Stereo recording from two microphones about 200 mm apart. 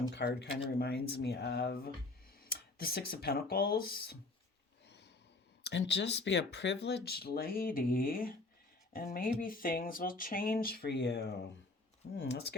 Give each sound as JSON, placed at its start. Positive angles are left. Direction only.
{"t": 0.1, "sound": "speech", "side_deg": 60}
{"t": 5.6, "sound": "speech", "side_deg": 60}